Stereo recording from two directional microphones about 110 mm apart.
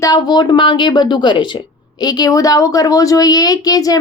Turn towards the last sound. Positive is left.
turn(degrees=35)  # may be behind; listen again after turning